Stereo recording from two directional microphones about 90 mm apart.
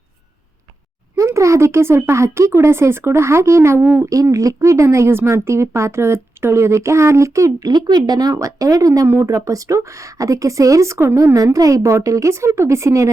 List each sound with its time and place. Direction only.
1.1 s a woman's voice: 35° right (ahead or behind)